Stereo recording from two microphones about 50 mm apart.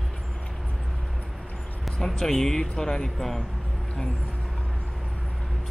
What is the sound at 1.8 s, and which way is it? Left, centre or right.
Speech, centre.